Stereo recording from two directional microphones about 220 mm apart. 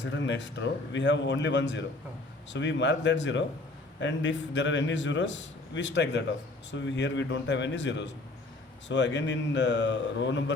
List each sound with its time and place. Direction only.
0.0 s a man's voice: 55° left (ahead or behind)